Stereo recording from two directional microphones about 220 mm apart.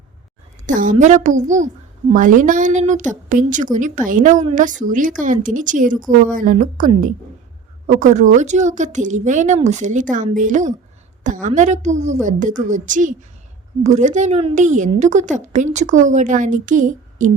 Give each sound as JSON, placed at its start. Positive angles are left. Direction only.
{"t": 0.7, "sound": "a woman's voice", "side_deg": -35}